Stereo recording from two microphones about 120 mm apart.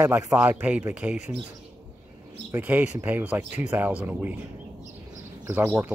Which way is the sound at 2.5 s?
15° right (ahead or behind).